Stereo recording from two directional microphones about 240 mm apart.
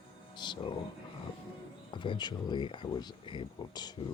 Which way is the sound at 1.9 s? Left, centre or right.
Centre.